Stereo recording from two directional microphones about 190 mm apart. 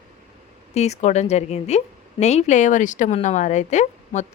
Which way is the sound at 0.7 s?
35° left (ahead or behind).